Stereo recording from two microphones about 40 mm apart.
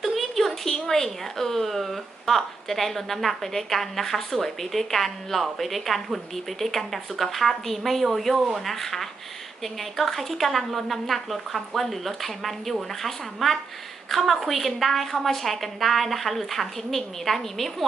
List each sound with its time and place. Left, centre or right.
0.0 s a woman's voice: centre